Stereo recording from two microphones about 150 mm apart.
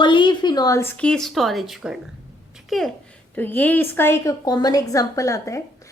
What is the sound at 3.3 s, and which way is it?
A woman's voice, 10° left (ahead or behind).